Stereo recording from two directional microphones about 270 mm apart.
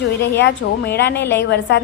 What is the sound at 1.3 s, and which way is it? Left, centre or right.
Speech, left.